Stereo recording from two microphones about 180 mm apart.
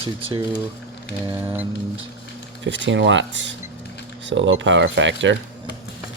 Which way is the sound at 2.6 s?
90° right.